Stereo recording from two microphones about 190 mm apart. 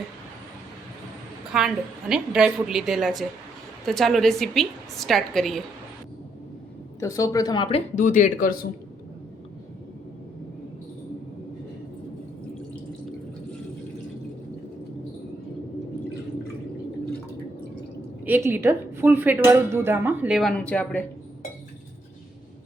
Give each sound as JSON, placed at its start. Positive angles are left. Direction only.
{"t": 1.5, "sound": "a woman's voice", "side_deg": -5}
{"t": 7.0, "sound": "a woman's voice", "side_deg": 15}
{"t": 7.9, "sound": "speech", "side_deg": 40}
{"t": 18.3, "sound": "a woman's voice", "side_deg": -10}
{"t": 20.6, "sound": "speech", "side_deg": 10}